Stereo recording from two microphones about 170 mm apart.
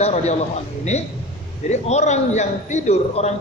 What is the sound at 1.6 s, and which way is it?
A man's voice, 40° left (ahead or behind).